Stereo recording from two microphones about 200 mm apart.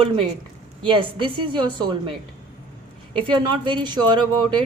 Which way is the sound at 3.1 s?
25° right (ahead or behind).